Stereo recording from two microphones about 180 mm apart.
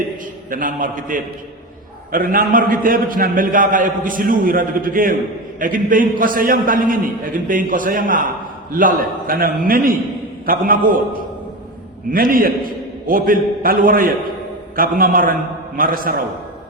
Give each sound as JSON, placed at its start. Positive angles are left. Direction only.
{"t": 0.5, "sound": "a man's voice", "side_deg": -50}